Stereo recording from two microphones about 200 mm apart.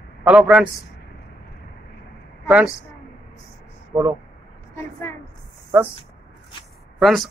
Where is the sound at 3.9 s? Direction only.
15° right (ahead or behind).